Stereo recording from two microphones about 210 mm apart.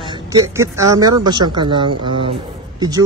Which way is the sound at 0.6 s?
15° right (ahead or behind).